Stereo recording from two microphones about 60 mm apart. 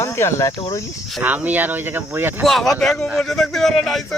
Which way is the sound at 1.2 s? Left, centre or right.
Right.